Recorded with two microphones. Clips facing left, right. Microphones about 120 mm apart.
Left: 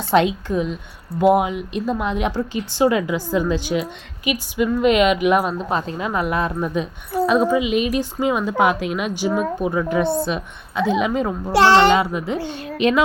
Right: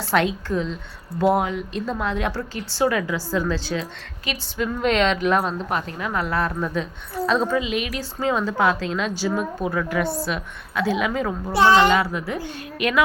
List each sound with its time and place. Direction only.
0.0 s speech: 20° left (ahead or behind)
5.7 s a woman's voice: 25° left (ahead or behind)
11.5 s a child's voice: 90° left
11.8 s a woman's voice: 25° left (ahead or behind)